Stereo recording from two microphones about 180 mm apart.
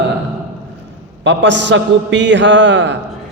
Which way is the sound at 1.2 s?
80° right.